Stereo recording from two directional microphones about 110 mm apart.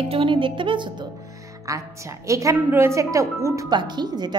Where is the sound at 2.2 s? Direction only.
30° right (ahead or behind).